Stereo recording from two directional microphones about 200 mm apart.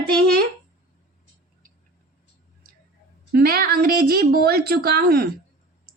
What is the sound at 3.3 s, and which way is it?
A woman's voice, 50° right (ahead or behind).